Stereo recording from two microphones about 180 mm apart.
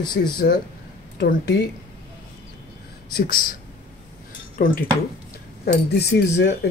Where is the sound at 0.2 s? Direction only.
55° left (ahead or behind).